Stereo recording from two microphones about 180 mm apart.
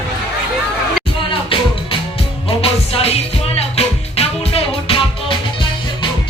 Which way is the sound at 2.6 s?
35° left (ahead or behind).